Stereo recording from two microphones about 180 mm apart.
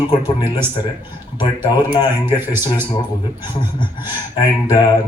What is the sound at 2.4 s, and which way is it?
Speech, 10° right (ahead or behind).